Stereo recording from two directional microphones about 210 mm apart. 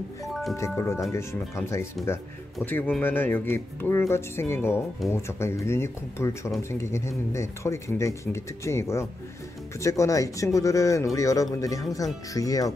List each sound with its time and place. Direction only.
0.3 s music: centre (ahead or behind)
0.7 s speech: 15° left (ahead or behind)
2.0 s speech: centre (ahead or behind); by 12.7 s 15° left (ahead or behind)